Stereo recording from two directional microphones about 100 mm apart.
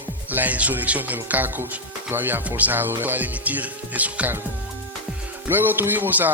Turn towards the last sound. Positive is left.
turn(degrees=-20)  # may be behind; listen again after turning